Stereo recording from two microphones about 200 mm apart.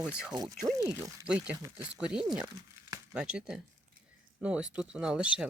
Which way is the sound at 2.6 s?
20° right (ahead or behind).